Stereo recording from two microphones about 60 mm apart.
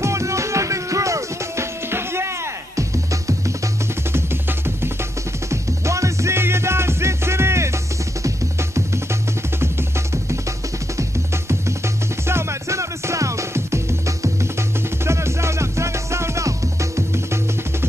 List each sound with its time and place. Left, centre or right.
0.0 s music: right
1.9 s music: right
5.5 s music: right
12.3 s music: right
15.0 s music: right